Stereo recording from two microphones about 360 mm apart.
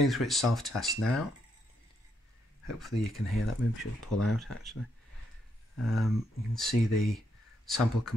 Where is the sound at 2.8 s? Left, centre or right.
Centre.